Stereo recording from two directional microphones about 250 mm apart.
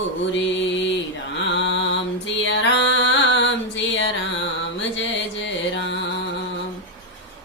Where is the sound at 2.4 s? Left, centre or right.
Left.